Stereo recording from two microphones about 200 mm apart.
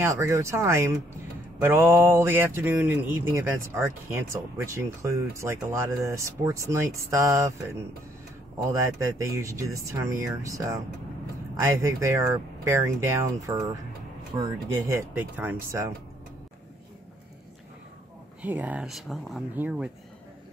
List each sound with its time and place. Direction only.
0.0 s speech: 15° right (ahead or behind)
8.7 s speech: 15° right (ahead or behind)
14.9 s speech: 10° right (ahead or behind)
18.4 s speech: 10° right (ahead or behind)